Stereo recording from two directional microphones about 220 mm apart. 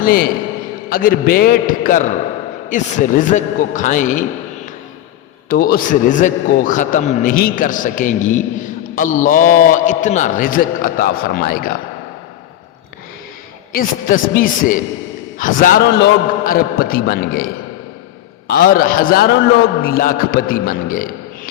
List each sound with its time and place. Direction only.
0.0 s a man's voice: 40° left (ahead or behind)
13.7 s a man's voice: 40° left (ahead or behind)